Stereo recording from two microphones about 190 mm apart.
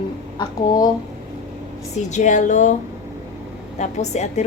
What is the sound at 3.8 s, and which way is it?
Speech, 35° left (ahead or behind).